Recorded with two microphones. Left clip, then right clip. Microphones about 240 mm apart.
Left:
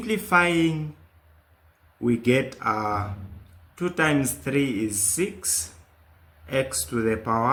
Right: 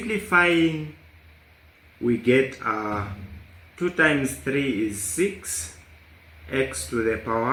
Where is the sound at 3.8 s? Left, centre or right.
Left.